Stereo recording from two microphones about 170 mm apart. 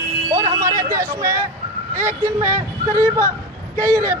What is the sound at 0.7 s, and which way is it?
Speech, 55° right (ahead or behind).